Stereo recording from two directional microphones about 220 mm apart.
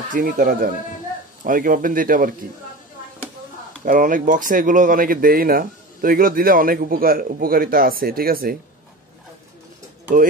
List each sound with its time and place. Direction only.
0.1 s speech: 40° right (ahead or behind)
3.8 s speech: 35° right (ahead or behind)